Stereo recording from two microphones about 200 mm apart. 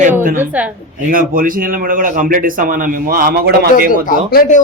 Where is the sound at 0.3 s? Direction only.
5° right (ahead or behind).